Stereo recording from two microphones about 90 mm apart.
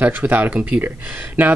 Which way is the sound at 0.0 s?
20° right (ahead or behind).